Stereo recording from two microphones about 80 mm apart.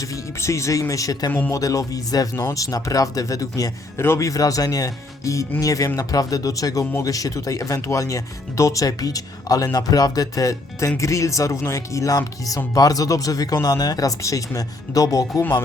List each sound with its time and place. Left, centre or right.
0.4 s speech: left
4.0 s a man's voice: left
4.3 s speech: left
15.4 s a man's voice: left